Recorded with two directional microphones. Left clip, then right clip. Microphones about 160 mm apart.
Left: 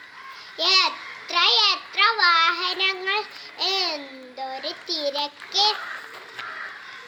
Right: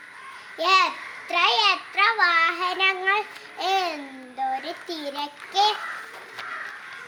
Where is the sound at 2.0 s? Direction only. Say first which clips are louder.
Left 2 dB; 15° right (ahead or behind).